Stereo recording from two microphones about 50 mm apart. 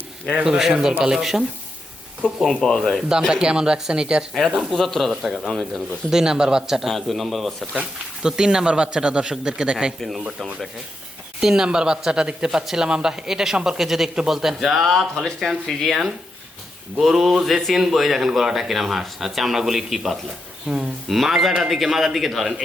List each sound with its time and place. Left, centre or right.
0.4 s speech: centre
2.6 s speech: centre
3.3 s speech: centre
4.4 s speech: centre
5.9 s speech: centre
6.8 s speech: centre
11.3 s speech: centre
20.7 s speech: right
21.1 s speech: centre